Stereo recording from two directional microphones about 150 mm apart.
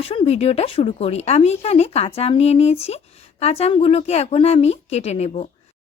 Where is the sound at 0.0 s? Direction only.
40° left (ahead or behind).